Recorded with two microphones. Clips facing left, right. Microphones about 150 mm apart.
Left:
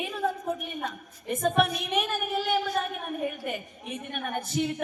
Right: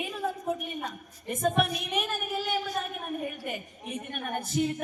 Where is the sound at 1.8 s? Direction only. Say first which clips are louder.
Left 3 dB; 50° left (ahead or behind).